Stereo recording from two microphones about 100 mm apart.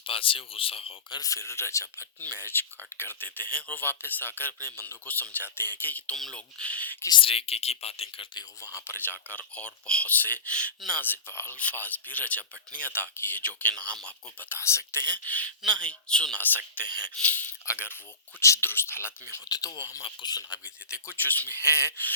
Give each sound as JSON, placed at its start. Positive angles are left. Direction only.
{"t": 0.0, "sound": "speech", "side_deg": 65}
{"t": 1.1, "sound": "speech", "side_deg": 35}
{"t": 6.1, "sound": "speech", "side_deg": 5}
{"t": 7.1, "sound": "speech", "side_deg": 65}
{"t": 8.6, "sound": "speech", "side_deg": 30}
{"t": 9.0, "sound": "speech", "side_deg": 15}
{"t": 11.0, "sound": "speech", "side_deg": 20}
{"t": 12.8, "sound": "speech", "side_deg": -20}
{"t": 13.1, "sound": "speech", "side_deg": 20}
{"t": 14.5, "sound": "speech", "side_deg": 25}
{"t": 19.5, "sound": "speech", "side_deg": 40}
{"t": 21.1, "sound": "speech", "side_deg": 20}